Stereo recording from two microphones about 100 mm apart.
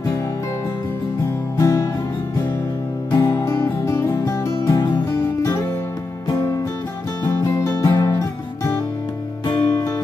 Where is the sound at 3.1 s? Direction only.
40° left (ahead or behind).